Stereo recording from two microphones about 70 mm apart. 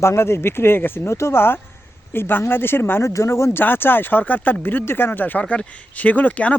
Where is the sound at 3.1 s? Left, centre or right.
Left.